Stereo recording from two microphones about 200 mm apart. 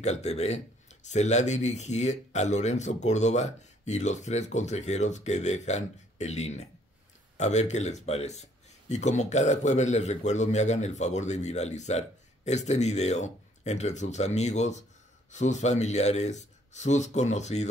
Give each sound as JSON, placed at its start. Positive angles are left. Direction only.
{"t": 0.0, "sound": "a man's voice", "side_deg": 35}